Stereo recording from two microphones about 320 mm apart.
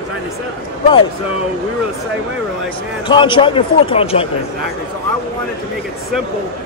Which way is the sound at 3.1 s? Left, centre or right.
Centre.